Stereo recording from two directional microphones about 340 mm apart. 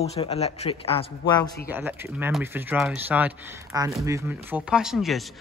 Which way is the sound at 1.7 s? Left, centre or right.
Centre.